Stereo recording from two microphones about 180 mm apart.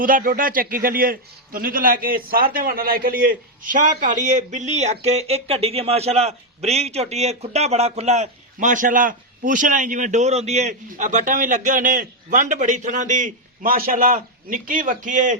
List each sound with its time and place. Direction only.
0.0 s a man's voice: 50° right (ahead or behind)